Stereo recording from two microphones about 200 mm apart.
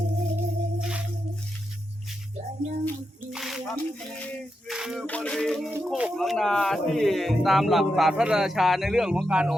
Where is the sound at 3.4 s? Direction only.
Centre (ahead or behind).